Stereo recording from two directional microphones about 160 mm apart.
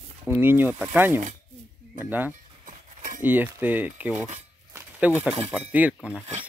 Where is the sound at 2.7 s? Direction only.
55° right (ahead or behind).